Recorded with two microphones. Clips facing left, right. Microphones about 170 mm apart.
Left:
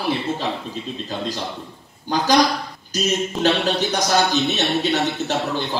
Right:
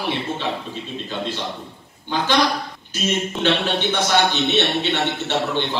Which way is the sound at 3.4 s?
40° left (ahead or behind).